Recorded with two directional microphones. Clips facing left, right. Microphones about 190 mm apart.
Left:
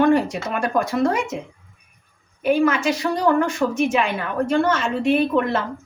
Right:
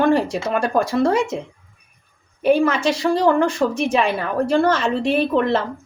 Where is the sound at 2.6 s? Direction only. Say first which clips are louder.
Right 1 dB; 30° right (ahead or behind).